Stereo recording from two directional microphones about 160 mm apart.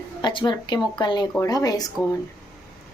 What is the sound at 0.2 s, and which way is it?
Speech, 30° left (ahead or behind).